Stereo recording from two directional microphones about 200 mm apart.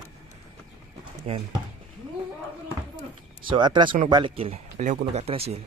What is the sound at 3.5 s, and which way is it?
Speech, 25° right (ahead or behind).